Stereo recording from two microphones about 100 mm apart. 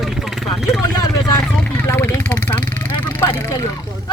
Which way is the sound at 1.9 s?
25° left (ahead or behind).